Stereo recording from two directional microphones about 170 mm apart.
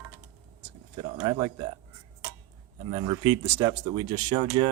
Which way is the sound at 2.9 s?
25° right (ahead or behind).